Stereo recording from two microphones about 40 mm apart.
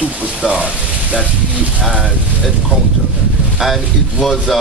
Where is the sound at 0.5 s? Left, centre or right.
Right.